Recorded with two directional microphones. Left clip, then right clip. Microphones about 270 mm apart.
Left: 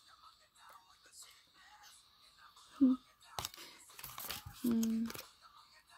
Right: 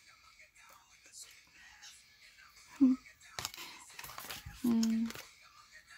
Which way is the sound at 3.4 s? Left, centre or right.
Left.